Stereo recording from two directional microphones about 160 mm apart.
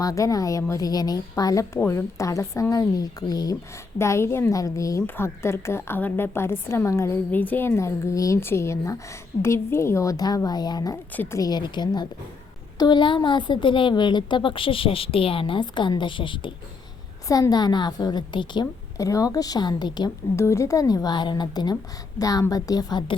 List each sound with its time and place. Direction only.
0.0 s a woman's voice: 20° left (ahead or behind)